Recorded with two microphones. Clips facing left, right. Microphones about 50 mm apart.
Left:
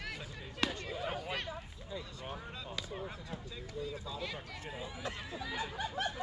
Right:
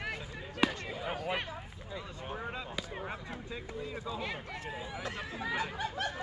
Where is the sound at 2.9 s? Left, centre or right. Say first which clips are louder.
Right 3 dB; right.